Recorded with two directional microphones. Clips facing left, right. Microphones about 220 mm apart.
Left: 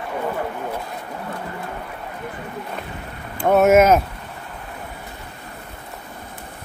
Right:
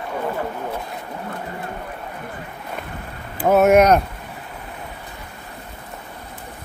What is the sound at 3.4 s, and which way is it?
Speech, centre (ahead or behind).